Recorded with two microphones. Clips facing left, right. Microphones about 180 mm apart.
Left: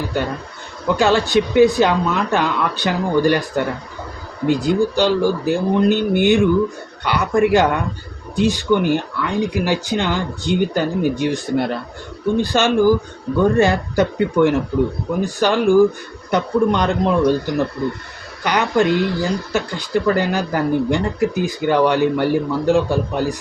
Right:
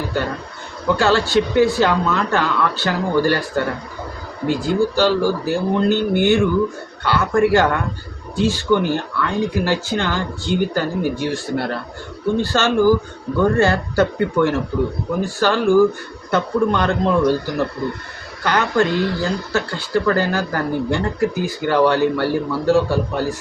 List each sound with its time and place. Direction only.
0.9 s speech: 15° left (ahead or behind)